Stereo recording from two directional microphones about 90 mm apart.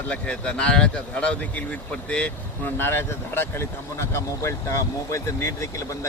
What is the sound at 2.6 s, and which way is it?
Speech, 25° left (ahead or behind).